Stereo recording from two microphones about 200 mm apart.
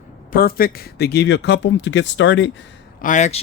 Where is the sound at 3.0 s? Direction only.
40° left (ahead or behind).